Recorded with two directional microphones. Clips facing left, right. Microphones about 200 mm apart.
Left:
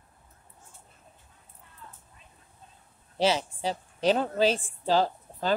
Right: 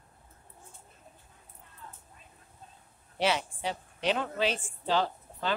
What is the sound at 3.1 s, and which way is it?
A woman's voice, 35° left (ahead or behind).